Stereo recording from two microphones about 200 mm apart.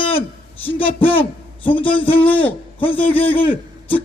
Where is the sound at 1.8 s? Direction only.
25° left (ahead or behind).